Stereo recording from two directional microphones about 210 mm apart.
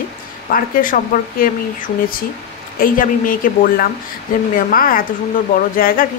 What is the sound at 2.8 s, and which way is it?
Speech, 40° left (ahead or behind).